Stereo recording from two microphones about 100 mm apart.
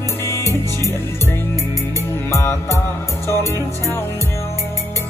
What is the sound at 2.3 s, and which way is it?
Music, 20° left (ahead or behind).